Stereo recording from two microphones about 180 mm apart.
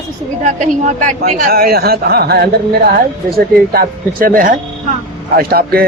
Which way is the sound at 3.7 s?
55° right (ahead or behind).